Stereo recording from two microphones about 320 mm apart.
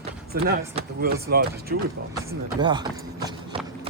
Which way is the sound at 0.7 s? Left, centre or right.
Right.